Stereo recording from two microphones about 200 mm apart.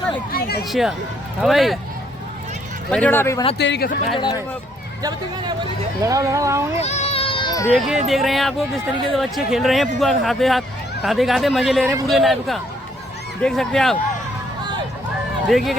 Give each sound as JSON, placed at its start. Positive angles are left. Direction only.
{"t": 0.3, "sound": "speech", "side_deg": 50}
{"t": 0.7, "sound": "speech", "side_deg": 0}
{"t": 2.9, "sound": "speech", "side_deg": 10}
{"t": 3.6, "sound": "speech", "side_deg": 60}
{"t": 4.1, "sound": "speech", "side_deg": 20}
{"t": 6.0, "sound": "speech", "side_deg": -15}
{"t": 6.7, "sound": "a sound", "side_deg": 35}
{"t": 7.8, "sound": "speech", "side_deg": 0}
{"t": 15.4, "sound": "speech", "side_deg": 0}